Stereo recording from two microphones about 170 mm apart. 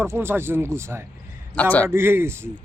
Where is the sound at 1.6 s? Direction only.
10° left (ahead or behind).